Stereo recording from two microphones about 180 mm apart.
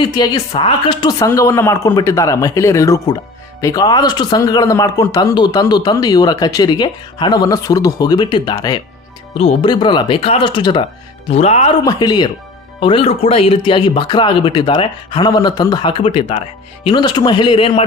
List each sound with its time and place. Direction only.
0.0 s speech: 25° left (ahead or behind)
11.8 s speech: 25° left (ahead or behind)